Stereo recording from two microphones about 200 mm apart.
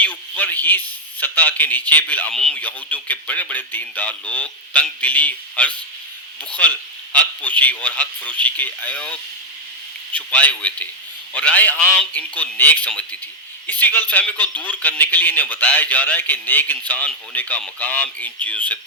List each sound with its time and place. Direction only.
0.0 s a man's voice: 10° left (ahead or behind)